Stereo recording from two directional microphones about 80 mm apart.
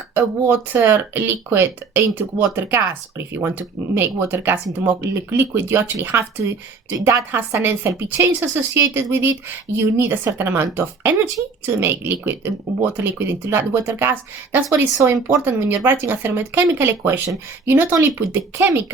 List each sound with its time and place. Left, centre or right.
0.1 s speech: right
18.3 s speech: right